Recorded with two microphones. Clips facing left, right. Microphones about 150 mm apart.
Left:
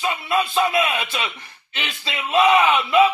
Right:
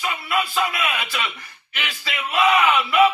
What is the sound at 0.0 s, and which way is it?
A man's voice, 25° left (ahead or behind).